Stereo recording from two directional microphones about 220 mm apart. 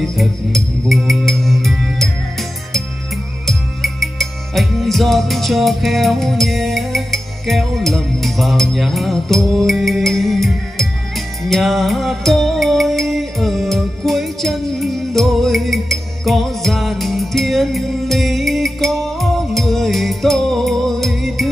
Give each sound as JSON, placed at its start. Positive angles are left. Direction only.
{"t": 0.0, "sound": "music", "side_deg": 0}
{"t": 3.4, "sound": "music", "side_deg": 0}